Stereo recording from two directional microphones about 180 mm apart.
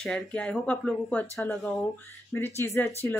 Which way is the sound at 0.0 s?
5° left (ahead or behind).